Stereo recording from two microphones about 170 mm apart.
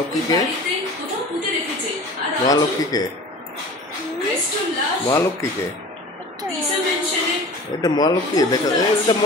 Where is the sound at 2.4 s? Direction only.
20° left (ahead or behind).